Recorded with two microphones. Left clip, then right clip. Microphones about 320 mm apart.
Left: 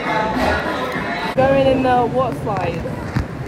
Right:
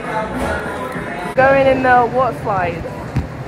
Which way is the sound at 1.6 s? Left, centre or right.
Right.